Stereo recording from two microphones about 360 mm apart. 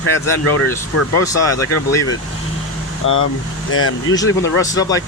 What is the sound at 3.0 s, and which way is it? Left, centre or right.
Speech, left.